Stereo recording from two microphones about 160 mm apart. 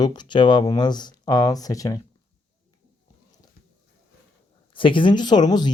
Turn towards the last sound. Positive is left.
turn(degrees=25)  # may be behind; listen again after turning